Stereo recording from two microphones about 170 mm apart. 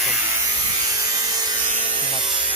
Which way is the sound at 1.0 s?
20° right (ahead or behind).